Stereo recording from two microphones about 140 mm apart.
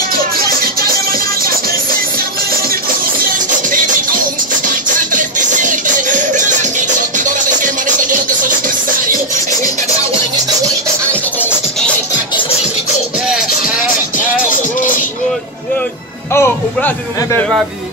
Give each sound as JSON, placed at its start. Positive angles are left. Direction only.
{"t": 4.6, "sound": "music", "side_deg": -65}
{"t": 16.3, "sound": "speech", "side_deg": 15}